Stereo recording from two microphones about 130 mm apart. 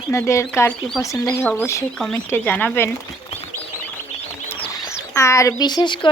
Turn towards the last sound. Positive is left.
turn(degrees=35)  # may be behind; listen again after turning